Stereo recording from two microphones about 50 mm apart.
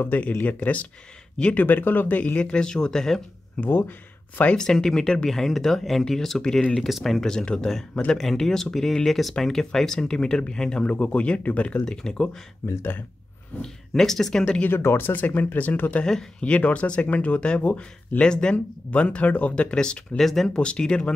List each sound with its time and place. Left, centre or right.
0.1 s speech: left
2.4 s speech: centre
3.6 s speech: left
4.7 s speech: centre
6.8 s speech: centre
7.2 s speech: centre
11.8 s speech: centre
12.6 s speech: left
13.6 s speech: centre
14.7 s speech: left
16.1 s speech: centre
20.2 s speech: centre
20.5 s speech: centre